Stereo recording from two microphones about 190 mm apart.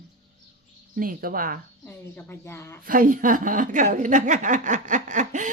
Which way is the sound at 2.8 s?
45° right (ahead or behind).